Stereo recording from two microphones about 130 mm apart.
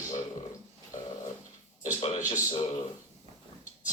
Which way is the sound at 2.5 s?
40° left (ahead or behind).